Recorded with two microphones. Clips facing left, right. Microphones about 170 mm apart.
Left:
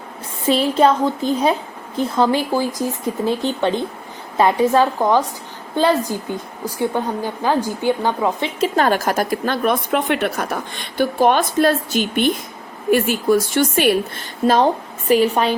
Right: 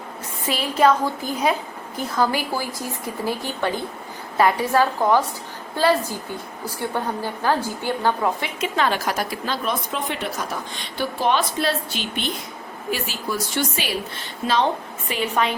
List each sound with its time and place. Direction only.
0.4 s a woman's voice: 25° left (ahead or behind)
8.6 s a woman's voice: 45° left (ahead or behind)